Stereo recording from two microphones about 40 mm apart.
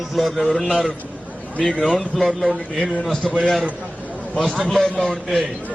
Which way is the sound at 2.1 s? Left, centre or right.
Centre.